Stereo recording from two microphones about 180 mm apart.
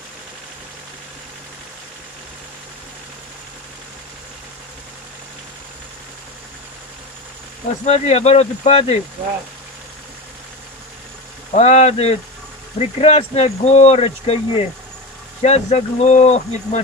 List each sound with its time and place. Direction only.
7.8 s speech: 40° left (ahead or behind)
11.5 s speech: 40° left (ahead or behind)